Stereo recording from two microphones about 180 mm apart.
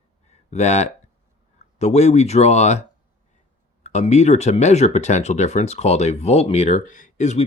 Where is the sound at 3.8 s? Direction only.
40° left (ahead or behind).